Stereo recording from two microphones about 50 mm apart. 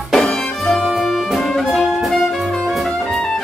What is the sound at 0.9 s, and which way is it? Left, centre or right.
Brass instrument, centre.